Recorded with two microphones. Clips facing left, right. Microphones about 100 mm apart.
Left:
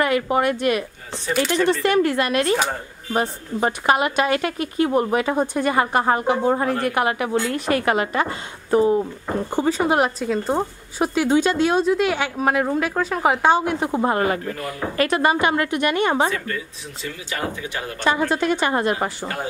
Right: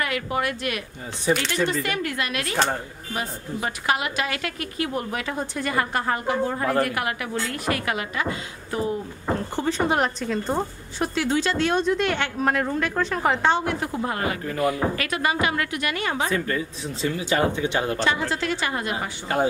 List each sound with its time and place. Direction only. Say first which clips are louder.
0.0 s a woman's voice: left 7 dB; 30° left (ahead or behind)
1.3 s speech: left 1 dB; 15° right (ahead or behind)
1.9 s a woman's voice: left 9 dB; 35° left (ahead or behind)
2.5 s speech: left 2 dB; centre (ahead or behind)
3.1 s a woman's voice: left 7 dB; 35° left (ahead or behind)
7.8 s a woman's voice: left 6 dB; 40° left (ahead or behind)
9.6 s speech: left 5 dB; 5° left (ahead or behind)
13.7 s a woman's voice: left 6 dB; 30° left (ahead or behind)
17.0 s speech: right 6 dB; 25° right (ahead or behind)
18.3 s speech: left 6 dB; 20° left (ahead or behind)
18.7 s a woman's voice: left 7 dB; 40° left (ahead or behind)